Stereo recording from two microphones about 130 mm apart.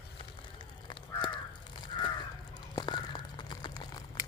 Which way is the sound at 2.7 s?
35° left (ahead or behind).